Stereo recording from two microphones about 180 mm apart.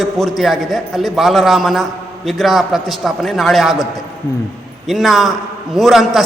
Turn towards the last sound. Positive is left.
turn(degrees=0)  # may be behind; listen again after turning